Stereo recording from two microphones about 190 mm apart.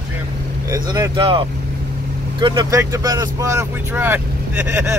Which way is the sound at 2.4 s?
20° right (ahead or behind).